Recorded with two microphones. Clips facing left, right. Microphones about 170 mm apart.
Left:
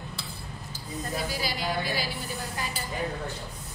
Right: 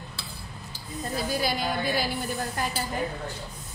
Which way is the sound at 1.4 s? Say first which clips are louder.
Right 3 dB; 55° right (ahead or behind).